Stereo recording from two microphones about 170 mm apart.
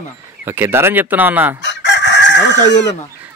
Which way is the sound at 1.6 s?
90° left.